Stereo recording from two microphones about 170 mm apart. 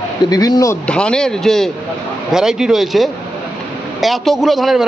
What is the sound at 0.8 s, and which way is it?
A man's voice, 5° left (ahead or behind).